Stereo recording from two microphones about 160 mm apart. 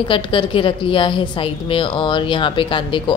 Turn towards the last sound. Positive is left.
turn(degrees=30)  # may be behind; listen again after turning